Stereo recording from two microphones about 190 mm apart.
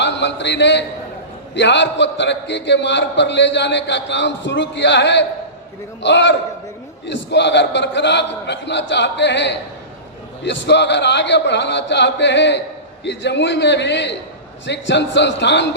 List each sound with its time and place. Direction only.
0.0 s a man's voice: 70° left (ahead or behind)